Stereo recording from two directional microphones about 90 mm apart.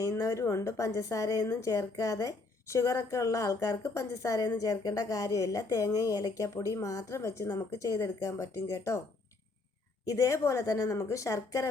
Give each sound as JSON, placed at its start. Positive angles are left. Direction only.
{"t": 0.0, "sound": "a woman's voice", "side_deg": 35}
{"t": 10.1, "sound": "a woman's voice", "side_deg": 35}